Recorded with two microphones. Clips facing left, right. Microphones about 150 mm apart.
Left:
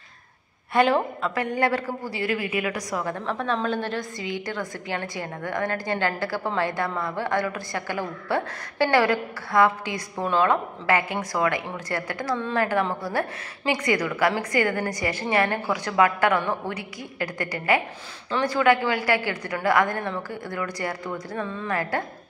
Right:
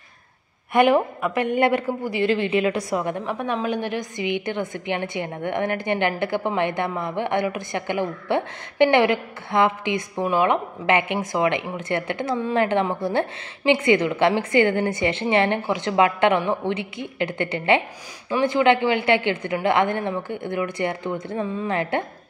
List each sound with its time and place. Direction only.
0.7 s a woman's voice: 15° right (ahead or behind)
12.4 s a woman's voice: 10° right (ahead or behind)
12.6 s a woman's voice: 25° right (ahead or behind)